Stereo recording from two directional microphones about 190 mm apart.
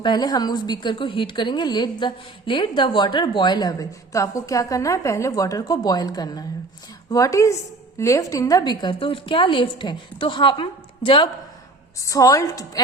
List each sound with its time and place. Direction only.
0.0 s a woman's voice: 20° left (ahead or behind)
11.9 s a woman's voice: 15° left (ahead or behind)